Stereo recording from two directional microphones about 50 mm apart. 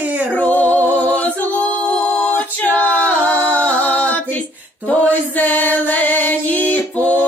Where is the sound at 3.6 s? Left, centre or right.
Left.